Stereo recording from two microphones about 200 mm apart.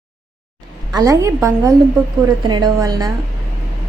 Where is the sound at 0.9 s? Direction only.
15° right (ahead or behind).